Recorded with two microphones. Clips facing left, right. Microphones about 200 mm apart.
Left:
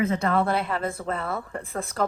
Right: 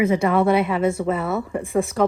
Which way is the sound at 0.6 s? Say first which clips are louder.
Right 8 dB; 5° right (ahead or behind).